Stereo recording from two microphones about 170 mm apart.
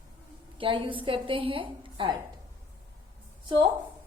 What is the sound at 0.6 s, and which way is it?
A woman's voice, 30° right (ahead or behind).